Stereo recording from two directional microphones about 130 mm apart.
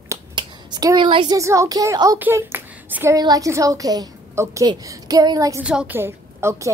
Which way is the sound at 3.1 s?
30° right (ahead or behind).